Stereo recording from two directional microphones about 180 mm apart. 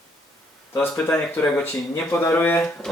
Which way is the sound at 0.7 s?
5° left (ahead or behind).